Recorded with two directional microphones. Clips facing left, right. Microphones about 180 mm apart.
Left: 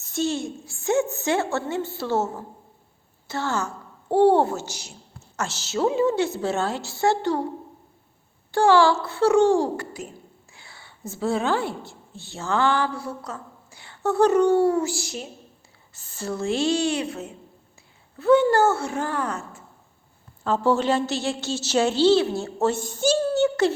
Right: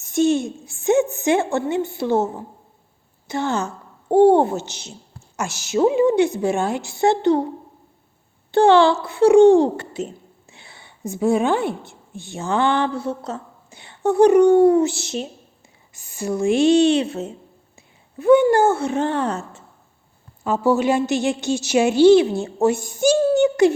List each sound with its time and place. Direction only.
0.0 s a woman's voice: 20° right (ahead or behind)
8.5 s a child's voice: 20° right (ahead or behind)
15.9 s a child's voice: 10° right (ahead or behind)
20.4 s a woman's voice: 10° right (ahead or behind)